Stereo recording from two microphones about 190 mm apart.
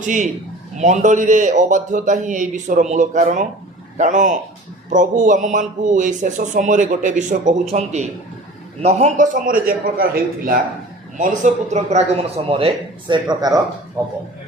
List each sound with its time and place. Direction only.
0.0 s a man's voice: 40° right (ahead or behind); by 13.6 s 20° right (ahead or behind)